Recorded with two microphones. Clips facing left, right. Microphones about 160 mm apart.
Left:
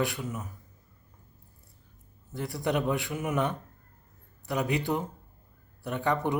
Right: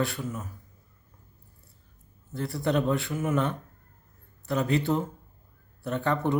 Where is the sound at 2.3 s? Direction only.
15° left (ahead or behind).